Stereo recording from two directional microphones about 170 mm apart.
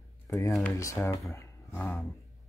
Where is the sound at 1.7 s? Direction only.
5° left (ahead or behind).